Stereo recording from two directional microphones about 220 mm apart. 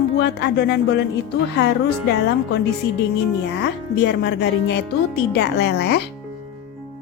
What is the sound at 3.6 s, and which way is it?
A woman's voice, 50° left (ahead or behind).